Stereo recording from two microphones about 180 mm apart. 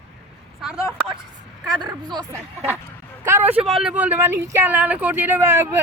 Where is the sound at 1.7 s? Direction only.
25° right (ahead or behind).